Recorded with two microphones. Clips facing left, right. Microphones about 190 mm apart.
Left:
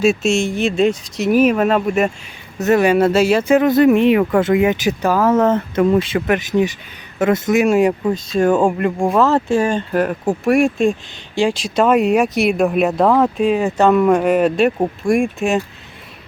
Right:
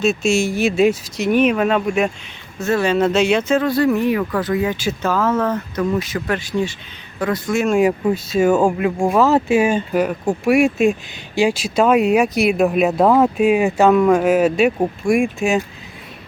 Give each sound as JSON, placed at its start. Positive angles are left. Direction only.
{"t": 0.0, "sound": "speech", "side_deg": 10}
{"t": 0.3, "sound": "speech", "side_deg": 0}
{"t": 2.6, "sound": "speech", "side_deg": 20}
{"t": 7.8, "sound": "speech", "side_deg": -5}